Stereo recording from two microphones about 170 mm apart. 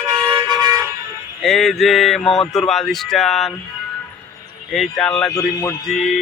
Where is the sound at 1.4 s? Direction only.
5° left (ahead or behind).